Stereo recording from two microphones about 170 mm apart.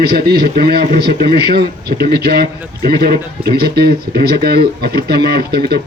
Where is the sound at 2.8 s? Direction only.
65° right (ahead or behind).